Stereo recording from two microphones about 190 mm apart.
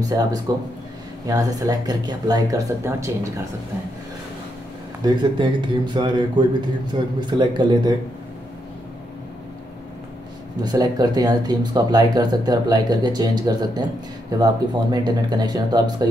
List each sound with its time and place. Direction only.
0.0 s speech: 20° right (ahead or behind)
5.0 s speech: 25° right (ahead or behind)
10.6 s speech: 20° right (ahead or behind)